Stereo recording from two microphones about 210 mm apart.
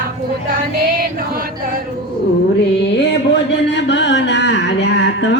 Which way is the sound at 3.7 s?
55° left (ahead or behind).